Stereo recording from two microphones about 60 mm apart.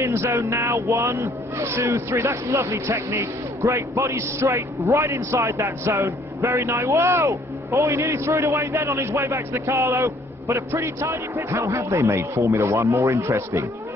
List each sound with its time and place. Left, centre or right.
0.0 s a man's voice: right
8.5 s a man's voice: right